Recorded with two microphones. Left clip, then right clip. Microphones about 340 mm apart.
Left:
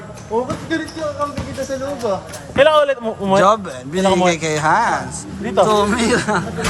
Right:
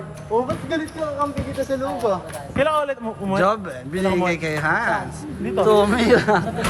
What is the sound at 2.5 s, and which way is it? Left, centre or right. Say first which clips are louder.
Speech: left 8 dB; left.